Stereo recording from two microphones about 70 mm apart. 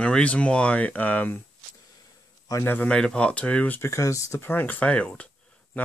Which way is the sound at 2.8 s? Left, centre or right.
Centre.